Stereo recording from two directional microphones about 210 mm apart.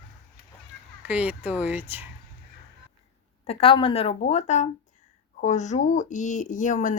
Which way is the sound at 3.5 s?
25° left (ahead or behind).